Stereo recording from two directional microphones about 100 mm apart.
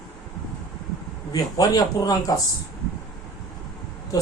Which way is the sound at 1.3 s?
40° left (ahead or behind).